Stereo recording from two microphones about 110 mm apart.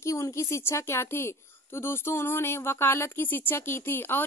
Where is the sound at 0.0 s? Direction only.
25° left (ahead or behind).